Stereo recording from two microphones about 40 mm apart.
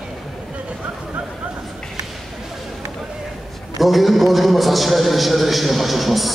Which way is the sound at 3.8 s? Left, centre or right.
Centre.